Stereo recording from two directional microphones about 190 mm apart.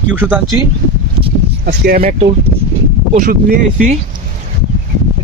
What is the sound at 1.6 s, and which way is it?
Speech, 50° right (ahead or behind).